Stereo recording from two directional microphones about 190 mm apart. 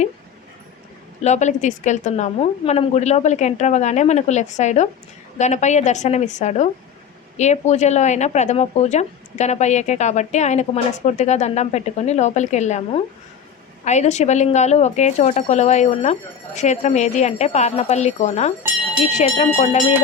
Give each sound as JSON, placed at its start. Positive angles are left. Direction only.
{"t": 1.2, "sound": "speech", "side_deg": 40}
{"t": 19.5, "sound": "speech", "side_deg": 35}